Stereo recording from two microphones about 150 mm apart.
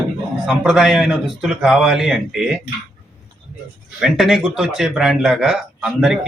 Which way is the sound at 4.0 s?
Centre (ahead or behind).